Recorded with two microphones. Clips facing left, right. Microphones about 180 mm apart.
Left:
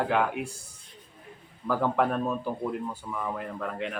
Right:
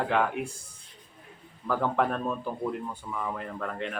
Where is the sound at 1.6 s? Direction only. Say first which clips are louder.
Left 1 dB; 5° left (ahead or behind).